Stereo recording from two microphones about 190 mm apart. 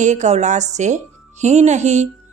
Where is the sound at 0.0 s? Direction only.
40° right (ahead or behind).